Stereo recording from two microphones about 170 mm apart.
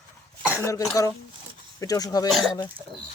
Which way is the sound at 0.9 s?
20° left (ahead or behind).